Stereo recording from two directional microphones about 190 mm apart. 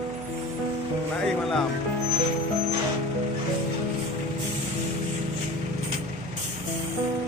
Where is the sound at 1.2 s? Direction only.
Centre (ahead or behind).